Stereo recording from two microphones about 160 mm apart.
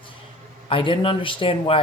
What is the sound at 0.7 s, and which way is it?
Speech, 35° left (ahead or behind).